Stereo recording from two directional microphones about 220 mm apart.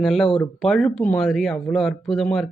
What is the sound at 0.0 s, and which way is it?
Speech, centre (ahead or behind).